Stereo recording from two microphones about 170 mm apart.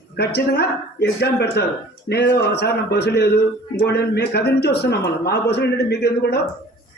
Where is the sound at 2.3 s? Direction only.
70° left (ahead or behind).